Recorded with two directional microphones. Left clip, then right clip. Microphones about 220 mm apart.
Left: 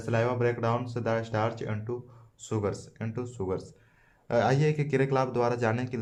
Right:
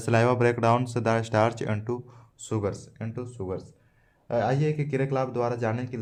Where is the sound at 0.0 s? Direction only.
40° right (ahead or behind).